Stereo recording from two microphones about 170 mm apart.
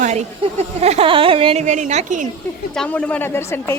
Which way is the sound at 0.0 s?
45° right (ahead or behind).